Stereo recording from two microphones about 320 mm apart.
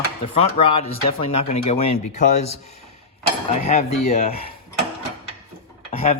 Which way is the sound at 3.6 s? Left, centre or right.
Centre.